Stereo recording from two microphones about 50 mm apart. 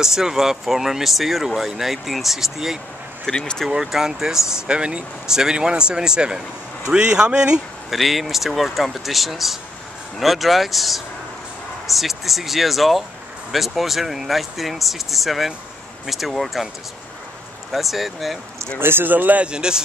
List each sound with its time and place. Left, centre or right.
0.0 s speech: centre
3.3 s speech: centre
3.7 s speech: centre
7.9 s speech: centre
17.6 s speech: centre
18.8 s speech: right
19.4 s speech: centre